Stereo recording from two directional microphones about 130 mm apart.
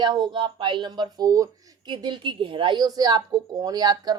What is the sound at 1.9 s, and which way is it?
Speech, 40° right (ahead or behind).